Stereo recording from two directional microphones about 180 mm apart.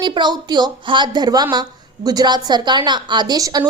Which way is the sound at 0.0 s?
25° right (ahead or behind).